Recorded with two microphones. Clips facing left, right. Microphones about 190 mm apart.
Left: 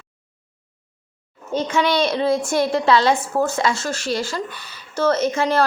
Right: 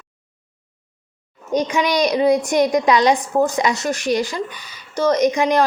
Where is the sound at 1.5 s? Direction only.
15° right (ahead or behind).